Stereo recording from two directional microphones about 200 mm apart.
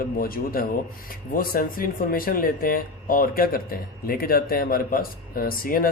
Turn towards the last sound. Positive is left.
turn(degrees=45)  # may be behind; listen again after turning